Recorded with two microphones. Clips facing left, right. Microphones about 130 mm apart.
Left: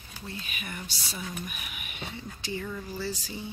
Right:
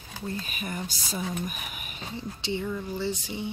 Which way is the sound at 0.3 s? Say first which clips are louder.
Right 5 dB; 40° right (ahead or behind).